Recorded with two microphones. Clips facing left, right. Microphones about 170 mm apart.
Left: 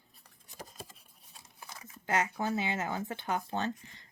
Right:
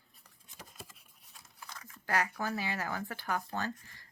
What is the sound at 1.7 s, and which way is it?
Speech, 20° left (ahead or behind).